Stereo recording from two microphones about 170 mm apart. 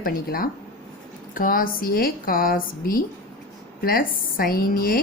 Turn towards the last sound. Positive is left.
turn(degrees=60)  # may be behind; listen again after turning